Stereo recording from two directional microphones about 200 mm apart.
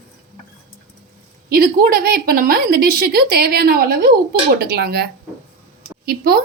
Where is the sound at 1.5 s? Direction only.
50° right (ahead or behind).